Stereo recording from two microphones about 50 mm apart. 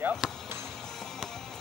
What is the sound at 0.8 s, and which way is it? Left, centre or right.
Music, centre.